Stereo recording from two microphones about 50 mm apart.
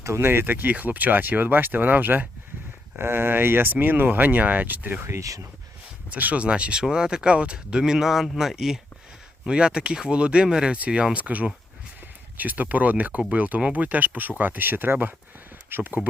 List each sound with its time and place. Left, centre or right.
0.0 s speech: right
0.3 s speech: right
5.0 s speech: right
6.1 s speech: right
6.4 s speech: right
10.8 s speech: right